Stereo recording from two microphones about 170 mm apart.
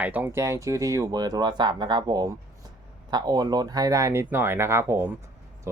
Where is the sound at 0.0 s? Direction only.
10° right (ahead or behind).